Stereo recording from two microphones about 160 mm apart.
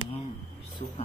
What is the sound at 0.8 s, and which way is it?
Speech, 35° left (ahead or behind).